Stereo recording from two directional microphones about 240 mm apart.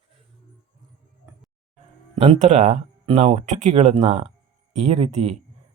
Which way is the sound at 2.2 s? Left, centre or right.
Right.